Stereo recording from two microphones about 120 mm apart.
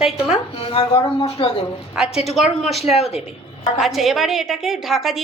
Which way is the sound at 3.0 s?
60° left (ahead or behind).